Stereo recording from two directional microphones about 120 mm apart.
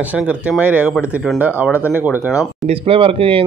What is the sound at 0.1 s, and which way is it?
Speech, 10° right (ahead or behind).